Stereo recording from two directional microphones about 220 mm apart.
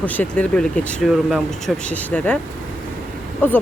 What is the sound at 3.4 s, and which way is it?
Speech, 10° left (ahead or behind).